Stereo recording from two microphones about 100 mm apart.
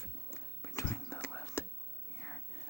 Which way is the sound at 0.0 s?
30° left (ahead or behind).